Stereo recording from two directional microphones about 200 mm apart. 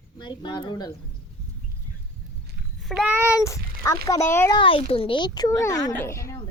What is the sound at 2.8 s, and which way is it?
Speech, 5° right (ahead or behind).